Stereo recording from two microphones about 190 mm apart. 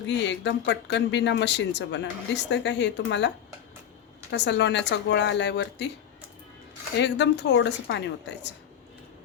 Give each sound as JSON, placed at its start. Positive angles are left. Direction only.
{"t": 0.1, "sound": "speech", "side_deg": 70}
{"t": 7.0, "sound": "speech", "side_deg": 65}